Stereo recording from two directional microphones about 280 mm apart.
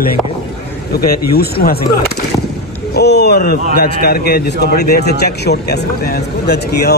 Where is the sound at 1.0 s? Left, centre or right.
Left.